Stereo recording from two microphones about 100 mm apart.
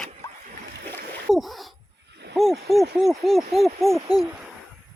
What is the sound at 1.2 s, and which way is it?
Splash, centre (ahead or behind).